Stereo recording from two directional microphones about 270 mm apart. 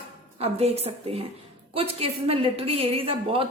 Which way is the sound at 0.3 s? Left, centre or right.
Right.